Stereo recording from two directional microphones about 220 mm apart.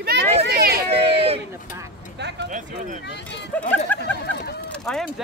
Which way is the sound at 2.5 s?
35° right (ahead or behind).